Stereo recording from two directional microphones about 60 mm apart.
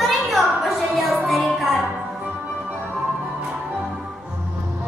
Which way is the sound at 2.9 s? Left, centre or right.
Centre.